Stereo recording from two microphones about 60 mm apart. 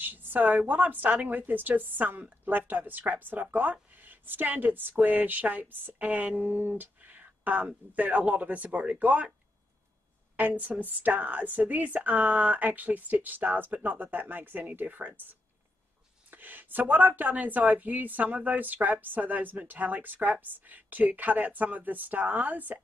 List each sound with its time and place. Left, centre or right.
0.0 s a woman's voice: right
10.3 s a woman's voice: right